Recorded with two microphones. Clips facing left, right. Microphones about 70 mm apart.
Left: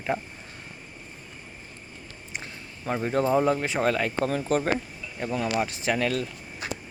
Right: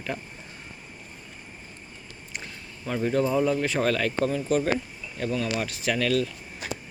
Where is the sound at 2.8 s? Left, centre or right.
Left.